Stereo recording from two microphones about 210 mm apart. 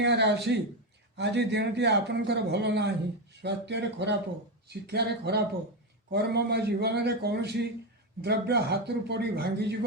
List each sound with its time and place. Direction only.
0.0 s a man's voice: 55° right (ahead or behind)